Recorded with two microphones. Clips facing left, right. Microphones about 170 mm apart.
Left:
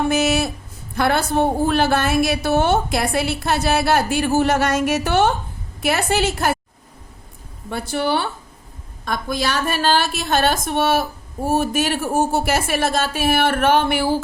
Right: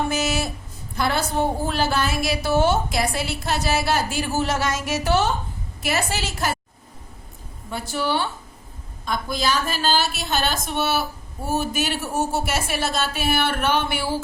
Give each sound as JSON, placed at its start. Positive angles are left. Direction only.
{"t": 0.1, "sound": "music", "side_deg": 60}
{"t": 0.9, "sound": "a woman's voice", "side_deg": 60}
{"t": 7.7, "sound": "a woman's voice", "side_deg": 60}